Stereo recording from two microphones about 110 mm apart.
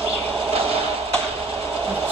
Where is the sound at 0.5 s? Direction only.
60° right (ahead or behind).